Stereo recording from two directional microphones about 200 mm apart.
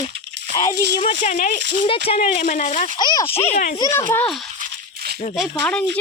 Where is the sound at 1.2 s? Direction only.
40° left (ahead or behind).